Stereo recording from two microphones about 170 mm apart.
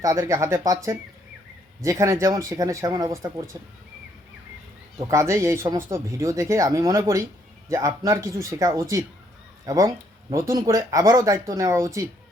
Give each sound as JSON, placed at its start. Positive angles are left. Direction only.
{"t": 0.0, "sound": "speech", "side_deg": -20}
{"t": 4.9, "sound": "speech", "side_deg": -20}